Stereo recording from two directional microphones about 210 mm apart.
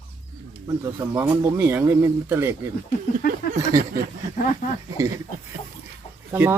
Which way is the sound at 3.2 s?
45° left (ahead or behind).